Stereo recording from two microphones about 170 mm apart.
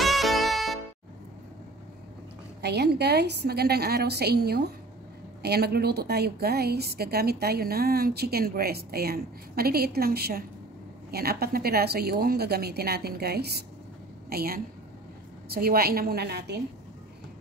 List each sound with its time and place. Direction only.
0.0 s music: centre (ahead or behind)
2.6 s a woman's voice: 75° right (ahead or behind)